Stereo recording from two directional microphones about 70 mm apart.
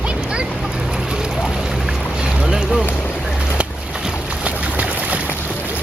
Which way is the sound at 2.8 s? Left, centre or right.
Left.